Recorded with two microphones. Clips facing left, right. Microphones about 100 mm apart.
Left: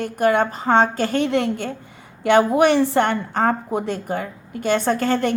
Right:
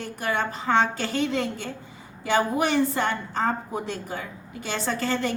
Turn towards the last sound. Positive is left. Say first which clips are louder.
# left 7 dB
turn(degrees=50)  # may be behind; listen again after turning